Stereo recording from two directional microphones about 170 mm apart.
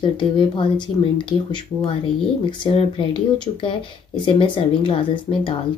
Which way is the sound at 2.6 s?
30° left (ahead or behind).